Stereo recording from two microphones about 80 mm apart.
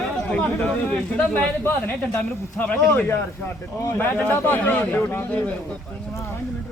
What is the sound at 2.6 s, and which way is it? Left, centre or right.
Speech, centre.